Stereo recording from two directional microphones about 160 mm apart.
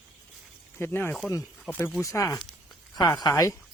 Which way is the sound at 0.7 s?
15° left (ahead or behind).